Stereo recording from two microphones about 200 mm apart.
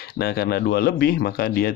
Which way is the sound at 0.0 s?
50° left (ahead or behind).